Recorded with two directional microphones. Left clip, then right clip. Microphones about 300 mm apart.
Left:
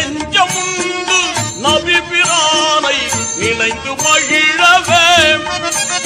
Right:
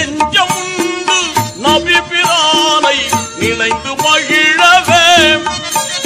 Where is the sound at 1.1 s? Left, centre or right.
Centre.